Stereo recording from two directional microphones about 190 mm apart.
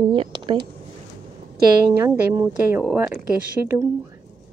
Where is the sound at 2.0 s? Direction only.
10° right (ahead or behind).